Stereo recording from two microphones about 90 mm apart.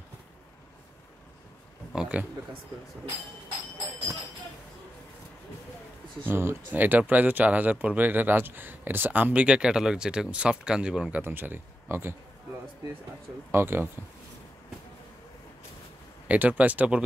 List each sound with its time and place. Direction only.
2.0 s speech: 15° right (ahead or behind)
6.2 s speech: 30° right (ahead or behind)
13.5 s speech: 25° right (ahead or behind)
16.3 s speech: 15° right (ahead or behind)